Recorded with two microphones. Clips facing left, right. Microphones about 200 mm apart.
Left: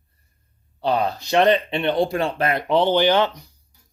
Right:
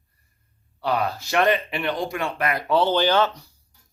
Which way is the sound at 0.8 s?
20° left (ahead or behind).